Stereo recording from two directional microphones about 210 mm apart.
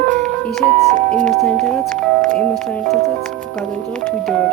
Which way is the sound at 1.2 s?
5° left (ahead or behind).